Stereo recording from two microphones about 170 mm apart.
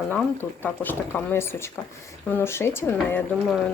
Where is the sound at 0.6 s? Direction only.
10° left (ahead or behind).